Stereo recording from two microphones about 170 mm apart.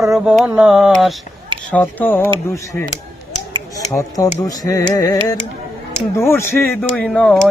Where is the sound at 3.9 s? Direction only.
20° left (ahead or behind).